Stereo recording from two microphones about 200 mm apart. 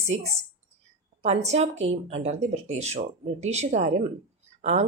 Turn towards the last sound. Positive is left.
turn(degrees=-35)  # may be behind; listen again after turning